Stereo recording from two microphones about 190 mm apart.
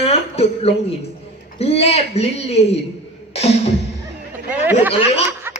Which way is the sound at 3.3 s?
35° left (ahead or behind).